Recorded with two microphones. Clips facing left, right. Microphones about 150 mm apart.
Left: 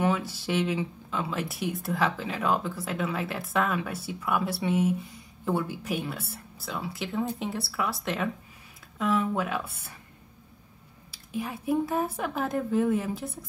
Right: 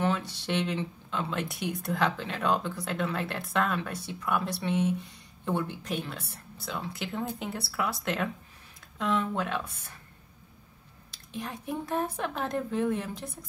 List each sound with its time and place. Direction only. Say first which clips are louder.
0.0 s speech: left 2 dB; 5° left (ahead or behind)
11.1 s speech: left 4 dB; 5° left (ahead or behind)